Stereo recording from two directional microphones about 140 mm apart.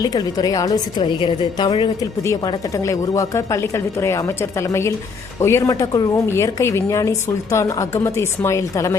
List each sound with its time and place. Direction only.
0.0 s a woman's voice: 30° left (ahead or behind)